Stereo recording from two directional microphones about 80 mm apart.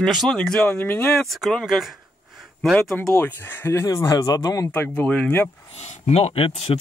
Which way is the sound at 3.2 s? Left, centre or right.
Left.